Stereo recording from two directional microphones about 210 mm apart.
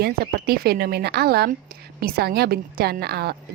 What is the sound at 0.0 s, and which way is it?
A woman's voice, 50° right (ahead or behind).